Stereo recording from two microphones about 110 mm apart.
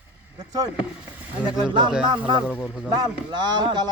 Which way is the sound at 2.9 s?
45° right (ahead or behind).